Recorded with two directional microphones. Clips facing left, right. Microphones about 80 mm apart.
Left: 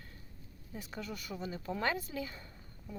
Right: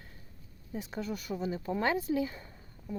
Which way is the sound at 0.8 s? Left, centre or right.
Right.